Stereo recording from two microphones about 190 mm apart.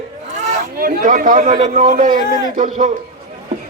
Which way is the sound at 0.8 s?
45° right (ahead or behind).